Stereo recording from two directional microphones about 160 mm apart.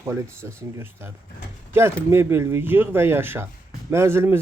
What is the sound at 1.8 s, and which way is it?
Speech, 15° right (ahead or behind).